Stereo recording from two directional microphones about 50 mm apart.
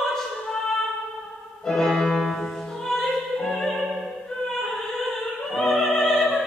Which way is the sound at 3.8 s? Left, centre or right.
Centre.